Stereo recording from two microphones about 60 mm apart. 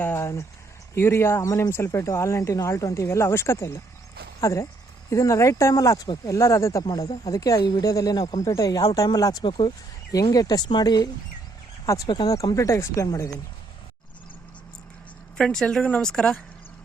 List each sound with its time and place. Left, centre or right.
0.0 s speech: left
4.4 s speech: left
6.9 s speech: left
11.9 s speech: left
15.4 s a woman's voice: centre